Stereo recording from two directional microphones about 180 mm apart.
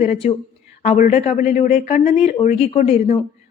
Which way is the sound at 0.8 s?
45° left (ahead or behind).